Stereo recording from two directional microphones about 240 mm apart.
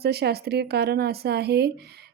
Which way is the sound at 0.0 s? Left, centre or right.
Right.